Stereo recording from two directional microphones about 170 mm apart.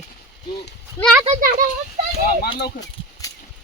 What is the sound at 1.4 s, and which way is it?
Speech, 55° right (ahead or behind).